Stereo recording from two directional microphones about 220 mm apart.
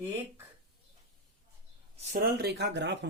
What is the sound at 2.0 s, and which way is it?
Speech, 40° right (ahead or behind).